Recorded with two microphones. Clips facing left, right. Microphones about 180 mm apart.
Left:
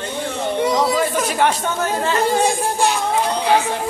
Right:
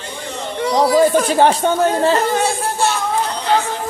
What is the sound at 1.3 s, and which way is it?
Speech, 30° right (ahead or behind).